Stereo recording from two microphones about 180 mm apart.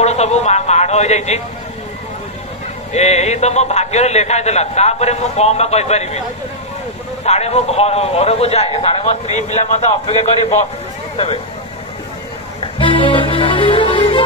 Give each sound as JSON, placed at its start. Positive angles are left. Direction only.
{"t": 0.0, "sound": "a sound", "side_deg": 35}
{"t": 2.9, "sound": "a man's voice", "side_deg": 40}
{"t": 7.2, "sound": "a man's voice", "side_deg": 35}
{"t": 12.5, "sound": "music", "side_deg": 30}